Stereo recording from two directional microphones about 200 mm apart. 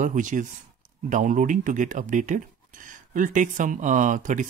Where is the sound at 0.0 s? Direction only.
40° right (ahead or behind).